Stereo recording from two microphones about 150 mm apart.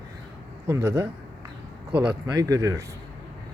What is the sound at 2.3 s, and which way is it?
Speech, 20° right (ahead or behind).